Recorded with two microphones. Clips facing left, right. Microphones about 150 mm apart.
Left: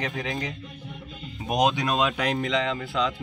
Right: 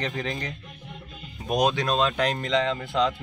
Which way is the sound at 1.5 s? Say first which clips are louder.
Even; 20° left (ahead or behind).